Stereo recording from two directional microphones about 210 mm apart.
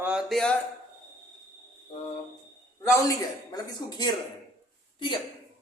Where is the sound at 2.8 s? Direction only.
15° left (ahead or behind).